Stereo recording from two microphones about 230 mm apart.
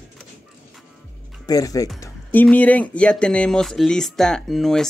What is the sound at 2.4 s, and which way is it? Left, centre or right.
Speech, centre.